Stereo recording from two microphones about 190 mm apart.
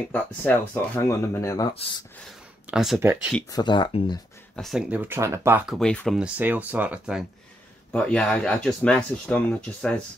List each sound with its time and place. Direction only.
0.1 s speech: 10° left (ahead or behind)
1.7 s speech: 30° left (ahead or behind)
2.6 s speech: 5° right (ahead or behind)
3.4 s speech: 20° left (ahead or behind)
4.6 s speech: centre (ahead or behind)
5.7 s speech: 5° left (ahead or behind)
7.9 s speech: 5° left (ahead or behind)